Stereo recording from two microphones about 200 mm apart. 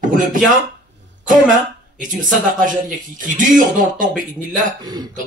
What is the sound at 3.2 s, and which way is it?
Speech, 40° right (ahead or behind).